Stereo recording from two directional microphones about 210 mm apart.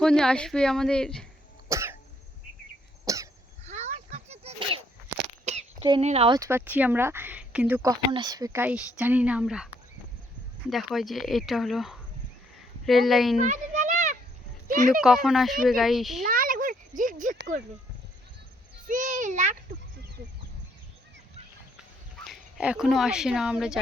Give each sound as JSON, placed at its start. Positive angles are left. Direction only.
{"t": 0.0, "sound": "speech", "side_deg": 5}
{"t": 1.7, "sound": "cough", "side_deg": -10}
{"t": 3.1, "sound": "cough", "side_deg": -15}
{"t": 3.6, "sound": "sneeze", "side_deg": -30}
{"t": 6.0, "sound": "speech", "side_deg": -30}
{"t": 10.7, "sound": "speech", "side_deg": 0}
{"t": 13.4, "sound": "a sound", "side_deg": -35}
{"t": 14.7, "sound": "speech", "side_deg": -40}
{"t": 15.0, "sound": "speech", "side_deg": 0}
{"t": 16.2, "sound": "a sound", "side_deg": -40}
{"t": 17.0, "sound": "speech", "side_deg": -40}
{"t": 18.9, "sound": "a child's voice", "side_deg": -40}
{"t": 22.3, "sound": "speech", "side_deg": -5}